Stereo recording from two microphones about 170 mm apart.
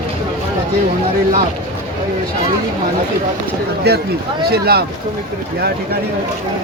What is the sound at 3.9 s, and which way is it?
Speech, 70° right (ahead or behind).